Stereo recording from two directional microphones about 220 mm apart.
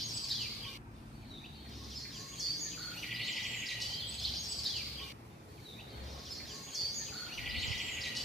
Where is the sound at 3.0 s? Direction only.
Centre (ahead or behind).